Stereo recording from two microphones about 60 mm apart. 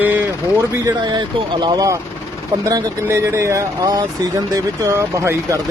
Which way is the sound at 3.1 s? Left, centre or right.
Right.